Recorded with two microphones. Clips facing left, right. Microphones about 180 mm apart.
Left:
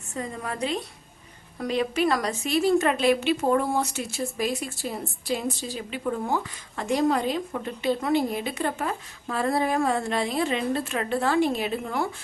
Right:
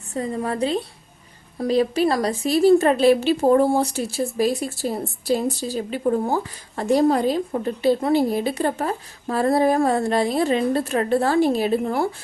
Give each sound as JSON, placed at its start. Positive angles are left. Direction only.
{"t": 0.1, "sound": "a woman's voice", "side_deg": -35}